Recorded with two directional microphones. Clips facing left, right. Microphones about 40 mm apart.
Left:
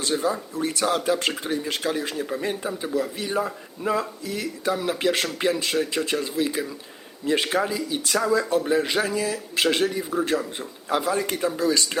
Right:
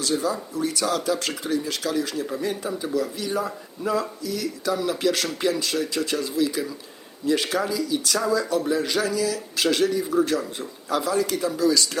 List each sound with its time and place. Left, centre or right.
0.0 s speech: left